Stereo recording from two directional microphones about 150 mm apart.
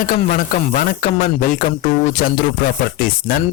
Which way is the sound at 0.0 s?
65° left (ahead or behind).